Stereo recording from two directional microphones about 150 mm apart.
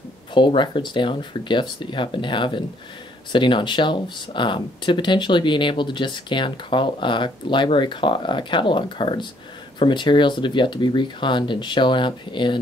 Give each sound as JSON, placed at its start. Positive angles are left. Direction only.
{"t": 0.3, "sound": "speech", "side_deg": 30}